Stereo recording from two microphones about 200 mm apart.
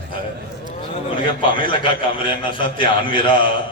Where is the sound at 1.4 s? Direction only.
25° left (ahead or behind).